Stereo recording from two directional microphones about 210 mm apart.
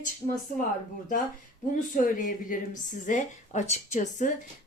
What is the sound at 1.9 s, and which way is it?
A woman's voice, 40° left (ahead or behind).